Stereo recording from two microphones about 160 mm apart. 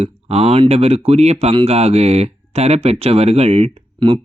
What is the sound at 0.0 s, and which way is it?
Speech, 40° right (ahead or behind).